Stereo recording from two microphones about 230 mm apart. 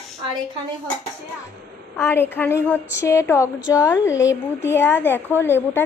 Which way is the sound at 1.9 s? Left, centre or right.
Centre.